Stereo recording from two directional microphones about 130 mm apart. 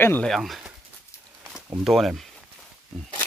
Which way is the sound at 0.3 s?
Centre (ahead or behind).